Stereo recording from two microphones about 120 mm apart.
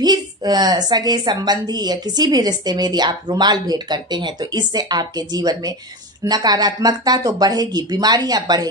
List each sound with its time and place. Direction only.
0.0 s a woman's voice: 35° right (ahead or behind)